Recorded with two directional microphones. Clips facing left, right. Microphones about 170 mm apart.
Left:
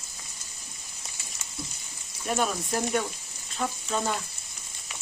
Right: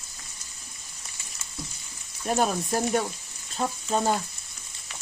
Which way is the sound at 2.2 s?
40° right (ahead or behind).